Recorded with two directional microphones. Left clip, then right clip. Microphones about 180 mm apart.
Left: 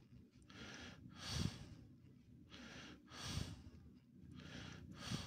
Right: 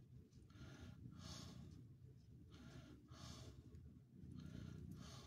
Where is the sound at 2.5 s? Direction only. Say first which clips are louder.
Left 8 dB; 15° left (ahead or behind).